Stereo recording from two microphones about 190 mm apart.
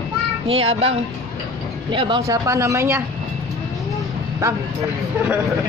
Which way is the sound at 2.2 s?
15° right (ahead or behind).